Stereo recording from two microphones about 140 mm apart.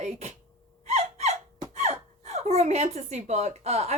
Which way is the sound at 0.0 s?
50° right (ahead or behind).